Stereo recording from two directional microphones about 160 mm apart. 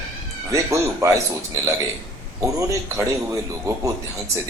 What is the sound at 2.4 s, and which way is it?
Speech, 20° right (ahead or behind).